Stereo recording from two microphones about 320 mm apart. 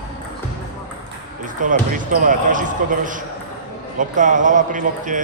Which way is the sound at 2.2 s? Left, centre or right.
Right.